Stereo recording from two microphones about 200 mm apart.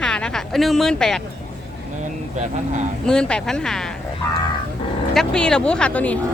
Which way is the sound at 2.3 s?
35° right (ahead or behind).